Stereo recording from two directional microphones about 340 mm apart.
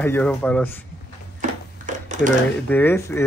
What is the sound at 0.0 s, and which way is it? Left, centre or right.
Speech, centre.